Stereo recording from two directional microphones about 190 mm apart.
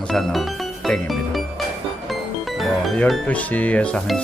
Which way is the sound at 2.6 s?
Centre (ahead or behind).